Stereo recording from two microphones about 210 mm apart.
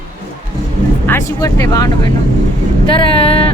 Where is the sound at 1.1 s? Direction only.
10° left (ahead or behind).